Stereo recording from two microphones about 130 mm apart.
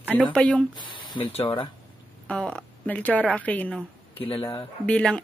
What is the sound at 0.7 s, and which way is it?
Speech, 40° left (ahead or behind).